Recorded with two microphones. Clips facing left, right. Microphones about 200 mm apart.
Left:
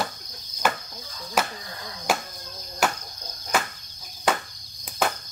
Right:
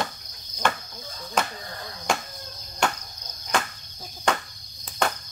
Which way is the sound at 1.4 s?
5° left (ahead or behind).